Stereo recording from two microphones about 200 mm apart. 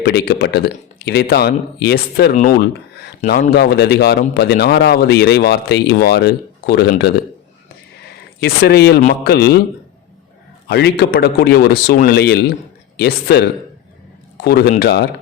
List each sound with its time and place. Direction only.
0.0 s speech: 55° left (ahead or behind)
8.4 s speech: 55° left (ahead or behind)
9.0 s a man's voice: 40° left (ahead or behind)
9.3 s speech: 55° left (ahead or behind)
10.7 s speech: 55° left (ahead or behind)